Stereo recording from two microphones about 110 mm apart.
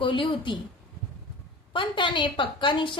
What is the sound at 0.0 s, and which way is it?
Speech, 50° left (ahead or behind).